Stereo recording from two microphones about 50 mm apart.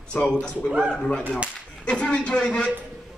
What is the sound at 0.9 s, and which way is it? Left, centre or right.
A man's voice, left.